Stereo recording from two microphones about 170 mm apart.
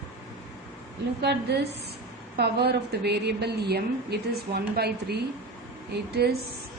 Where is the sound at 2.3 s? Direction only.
70° right (ahead or behind).